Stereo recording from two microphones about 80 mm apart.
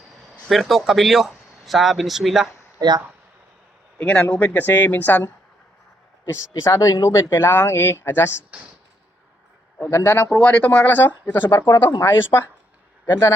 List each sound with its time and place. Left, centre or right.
0.4 s speech: centre
4.0 s speech: centre
6.5 s speech: left
9.8 s speech: left
10.3 s speech: centre
11.4 s speech: left
12.0 s a man's voice: left